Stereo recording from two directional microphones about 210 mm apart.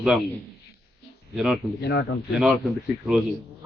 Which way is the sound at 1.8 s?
50° left (ahead or behind).